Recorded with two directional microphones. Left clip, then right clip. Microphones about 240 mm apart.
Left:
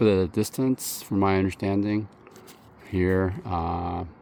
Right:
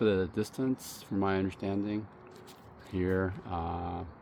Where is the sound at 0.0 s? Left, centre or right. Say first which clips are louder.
Left 7 dB; left.